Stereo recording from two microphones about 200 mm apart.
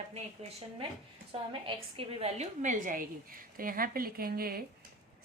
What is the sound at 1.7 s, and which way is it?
A woman's voice, 30° right (ahead or behind).